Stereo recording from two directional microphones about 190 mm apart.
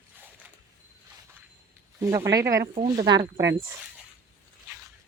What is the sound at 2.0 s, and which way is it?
Speech, 15° right (ahead or behind).